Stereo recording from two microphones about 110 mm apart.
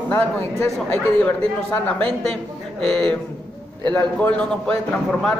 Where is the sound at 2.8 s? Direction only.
10° left (ahead or behind).